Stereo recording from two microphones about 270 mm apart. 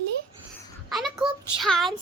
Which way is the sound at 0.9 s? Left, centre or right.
Centre.